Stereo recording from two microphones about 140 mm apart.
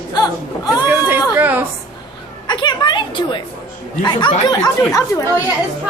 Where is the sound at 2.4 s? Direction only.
35° left (ahead or behind).